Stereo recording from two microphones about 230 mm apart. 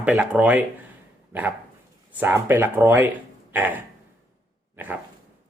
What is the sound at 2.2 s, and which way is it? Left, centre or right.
Speech, centre.